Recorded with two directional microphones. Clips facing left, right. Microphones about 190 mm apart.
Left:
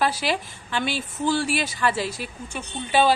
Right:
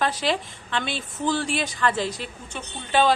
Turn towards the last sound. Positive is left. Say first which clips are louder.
# left 1 dB
turn(degrees=10)  # may be behind; listen again after turning